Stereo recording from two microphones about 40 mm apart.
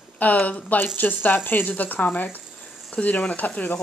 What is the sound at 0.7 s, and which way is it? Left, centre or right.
Speech, left.